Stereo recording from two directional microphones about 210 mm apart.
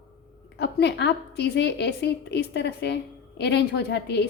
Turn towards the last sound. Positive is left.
turn(degrees=50)  # may be behind; listen again after turning